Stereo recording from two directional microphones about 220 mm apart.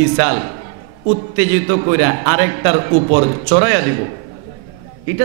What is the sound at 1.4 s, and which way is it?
A man's voice, 10° right (ahead or behind).